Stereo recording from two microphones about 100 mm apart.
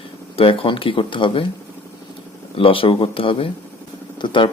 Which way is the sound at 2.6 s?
65° left (ahead or behind).